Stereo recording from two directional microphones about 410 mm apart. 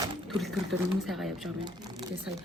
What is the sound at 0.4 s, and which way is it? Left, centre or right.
Speech, centre.